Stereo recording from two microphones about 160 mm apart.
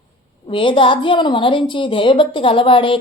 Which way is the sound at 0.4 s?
30° left (ahead or behind).